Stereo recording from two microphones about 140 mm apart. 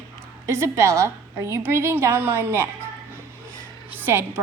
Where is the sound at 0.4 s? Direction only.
20° right (ahead or behind).